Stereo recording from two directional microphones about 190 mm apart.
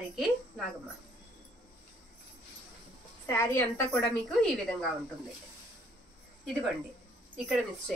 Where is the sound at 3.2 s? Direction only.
15° left (ahead or behind).